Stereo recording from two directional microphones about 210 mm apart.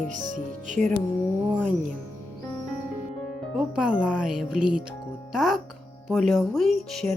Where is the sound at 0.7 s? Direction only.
35° right (ahead or behind).